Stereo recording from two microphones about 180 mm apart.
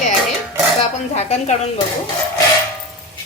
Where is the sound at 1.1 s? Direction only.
35° left (ahead or behind).